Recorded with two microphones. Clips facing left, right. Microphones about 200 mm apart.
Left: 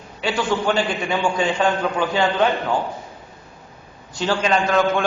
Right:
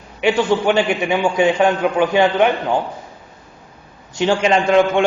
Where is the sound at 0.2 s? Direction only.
20° right (ahead or behind).